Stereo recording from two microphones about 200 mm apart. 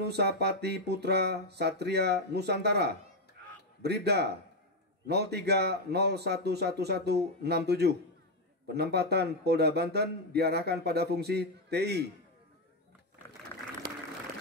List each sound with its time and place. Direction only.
0.0 s a man's voice: 55° right (ahead or behind)